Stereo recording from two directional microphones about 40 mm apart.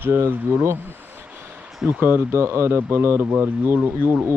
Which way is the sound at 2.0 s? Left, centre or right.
Right.